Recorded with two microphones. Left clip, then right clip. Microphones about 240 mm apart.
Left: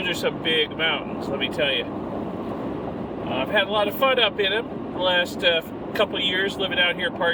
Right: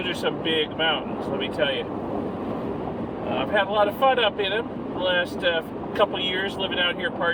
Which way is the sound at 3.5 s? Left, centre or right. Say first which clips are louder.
Even; centre.